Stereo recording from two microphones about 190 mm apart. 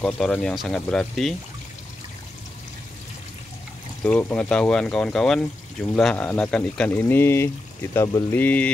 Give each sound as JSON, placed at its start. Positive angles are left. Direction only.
{"t": 0.0, "sound": "speech", "side_deg": 5}
{"t": 4.0, "sound": "speech", "side_deg": 10}